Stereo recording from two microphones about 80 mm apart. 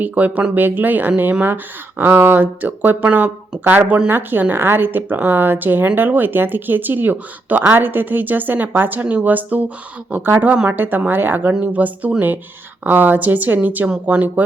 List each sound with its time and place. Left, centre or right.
0.0 s a woman's voice: centre